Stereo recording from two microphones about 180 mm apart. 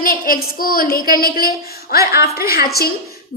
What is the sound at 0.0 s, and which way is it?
A woman's voice, 55° left (ahead or behind).